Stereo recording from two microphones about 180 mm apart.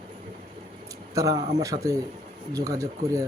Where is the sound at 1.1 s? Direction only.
20° right (ahead or behind).